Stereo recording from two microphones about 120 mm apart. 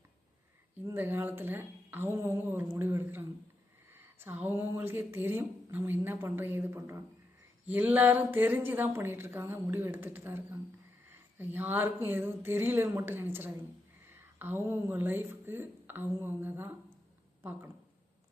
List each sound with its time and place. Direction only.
0.9 s a woman's voice: 20° right (ahead or behind)